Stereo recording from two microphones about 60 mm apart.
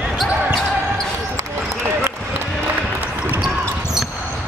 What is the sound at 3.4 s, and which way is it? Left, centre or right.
Basketball bounce, centre.